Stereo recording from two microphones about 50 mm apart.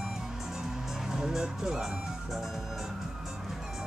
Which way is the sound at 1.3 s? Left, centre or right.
Centre.